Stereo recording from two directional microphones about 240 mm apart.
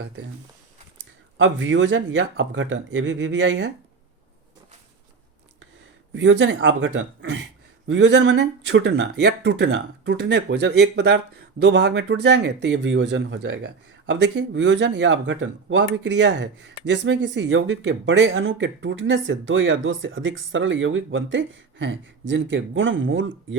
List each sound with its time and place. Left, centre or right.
1.4 s speech: right
6.1 s speech: right